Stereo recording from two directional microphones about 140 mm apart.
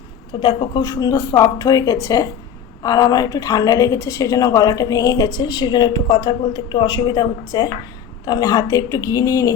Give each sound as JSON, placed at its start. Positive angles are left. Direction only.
{"t": 0.3, "sound": "a woman's voice", "side_deg": 30}